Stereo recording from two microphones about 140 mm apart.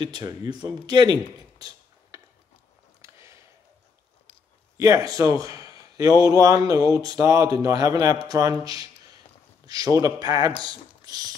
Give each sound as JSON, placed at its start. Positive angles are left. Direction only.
{"t": 0.0, "sound": "a man's voice", "side_deg": -30}
{"t": 3.0, "sound": "a sound", "side_deg": -20}
{"t": 4.7, "sound": "a man's voice", "side_deg": -25}